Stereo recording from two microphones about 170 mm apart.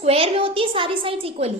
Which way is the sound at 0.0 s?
35° right (ahead or behind).